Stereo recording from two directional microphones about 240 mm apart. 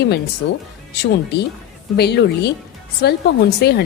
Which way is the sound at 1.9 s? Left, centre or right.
Left.